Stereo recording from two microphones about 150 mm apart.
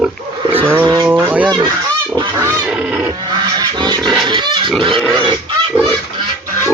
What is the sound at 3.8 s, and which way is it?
Speech, 30° right (ahead or behind).